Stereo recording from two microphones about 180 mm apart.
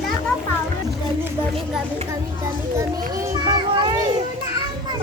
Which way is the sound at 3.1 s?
20° right (ahead or behind).